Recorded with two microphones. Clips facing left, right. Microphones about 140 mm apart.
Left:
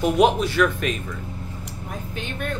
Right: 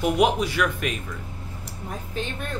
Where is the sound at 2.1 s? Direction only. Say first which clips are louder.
Even; 35° right (ahead or behind).